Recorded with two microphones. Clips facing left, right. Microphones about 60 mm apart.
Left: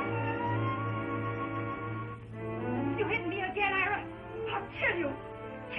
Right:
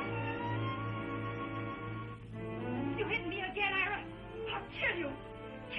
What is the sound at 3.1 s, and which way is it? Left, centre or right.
Music, left.